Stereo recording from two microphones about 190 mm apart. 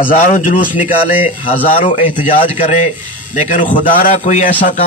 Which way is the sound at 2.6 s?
40° left (ahead or behind).